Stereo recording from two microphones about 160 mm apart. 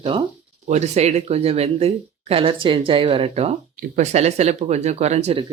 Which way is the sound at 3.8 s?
50° right (ahead or behind).